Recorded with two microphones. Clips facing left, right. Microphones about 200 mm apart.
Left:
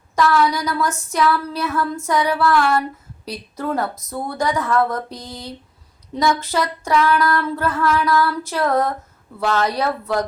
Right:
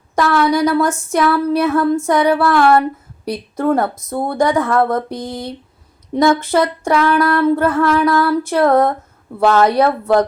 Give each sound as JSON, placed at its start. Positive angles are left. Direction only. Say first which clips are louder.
{"t": 0.2, "sound": "speech", "louder": "right 4 dB", "side_deg": -55}
{"t": 1.6, "sound": "female singing", "louder": "right 4 dB", "side_deg": -55}
{"t": 2.0, "sound": "a sound", "louder": "right 5 dB", "side_deg": -55}
{"t": 4.1, "sound": "female singing", "louder": "right 7 dB", "side_deg": -55}